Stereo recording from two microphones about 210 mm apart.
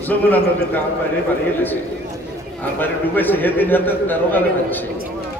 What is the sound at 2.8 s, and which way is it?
A man's voice, 10° left (ahead or behind).